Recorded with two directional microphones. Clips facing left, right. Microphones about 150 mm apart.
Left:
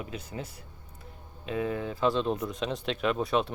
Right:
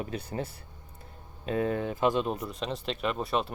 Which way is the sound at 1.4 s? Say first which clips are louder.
Right 2 dB; 40° right (ahead or behind).